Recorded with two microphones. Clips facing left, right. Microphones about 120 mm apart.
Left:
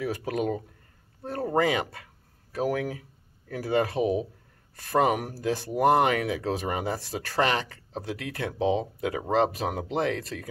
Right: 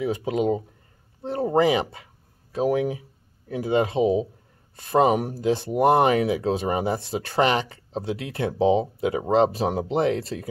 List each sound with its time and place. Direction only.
0.0 s speech: 20° right (ahead or behind)